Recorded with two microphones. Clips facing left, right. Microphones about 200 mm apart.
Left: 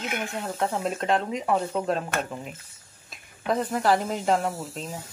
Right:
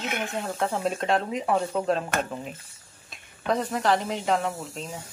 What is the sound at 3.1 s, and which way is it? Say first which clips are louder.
A woman's voice: even; 5° left (ahead or behind).